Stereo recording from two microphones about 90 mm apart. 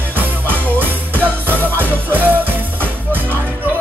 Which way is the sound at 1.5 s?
20° left (ahead or behind).